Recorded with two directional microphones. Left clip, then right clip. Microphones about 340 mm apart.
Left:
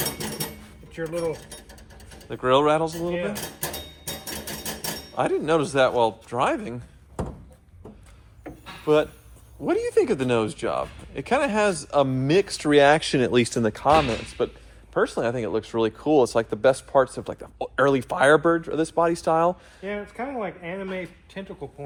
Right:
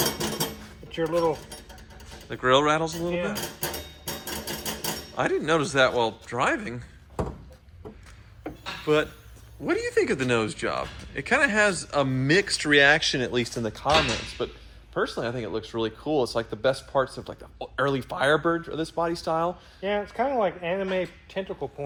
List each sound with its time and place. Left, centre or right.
1.0 s speech: centre
2.3 s speech: centre
5.1 s speech: centre
8.9 s speech: centre; by 19.5 s left
19.8 s speech: centre